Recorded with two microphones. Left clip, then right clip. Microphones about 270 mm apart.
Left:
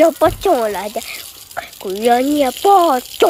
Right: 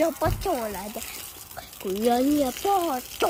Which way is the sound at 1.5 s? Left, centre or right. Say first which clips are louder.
Left 8 dB; centre.